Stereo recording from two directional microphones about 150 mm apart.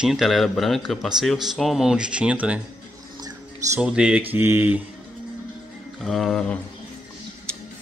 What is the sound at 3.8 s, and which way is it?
Speech, 5° right (ahead or behind).